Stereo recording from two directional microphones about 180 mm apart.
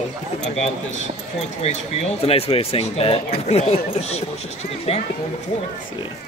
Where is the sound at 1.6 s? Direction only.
35° left (ahead or behind).